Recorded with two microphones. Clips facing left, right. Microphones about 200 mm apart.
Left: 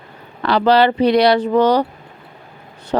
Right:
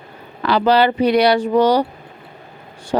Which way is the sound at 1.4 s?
10° right (ahead or behind).